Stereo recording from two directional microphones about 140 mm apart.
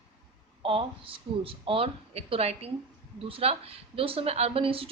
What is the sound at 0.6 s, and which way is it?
A woman's voice, 40° right (ahead or behind).